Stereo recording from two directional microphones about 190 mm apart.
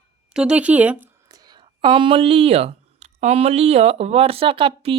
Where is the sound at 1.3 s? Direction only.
20° right (ahead or behind).